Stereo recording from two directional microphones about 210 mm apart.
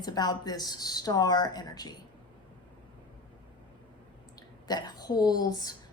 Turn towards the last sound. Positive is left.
turn(degrees=20)  # may be behind; listen again after turning